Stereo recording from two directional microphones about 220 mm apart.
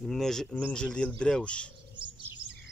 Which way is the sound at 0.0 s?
Centre (ahead or behind).